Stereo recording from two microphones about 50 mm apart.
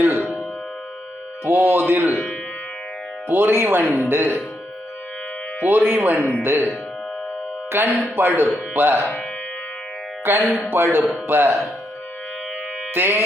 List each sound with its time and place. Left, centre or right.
0.0 s music: right
1.5 s speech: right
3.2 s speech: right
5.6 s a man's voice: right
6.4 s speech: right
7.7 s speech: right
10.3 s speech: right
12.9 s music: right